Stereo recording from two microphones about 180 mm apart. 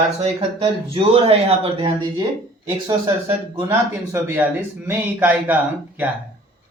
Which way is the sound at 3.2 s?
10° right (ahead or behind).